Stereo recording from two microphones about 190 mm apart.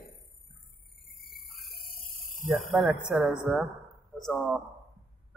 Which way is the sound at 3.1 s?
5° right (ahead or behind).